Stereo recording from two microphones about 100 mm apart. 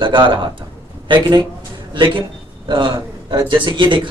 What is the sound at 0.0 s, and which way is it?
Speech, 55° right (ahead or behind).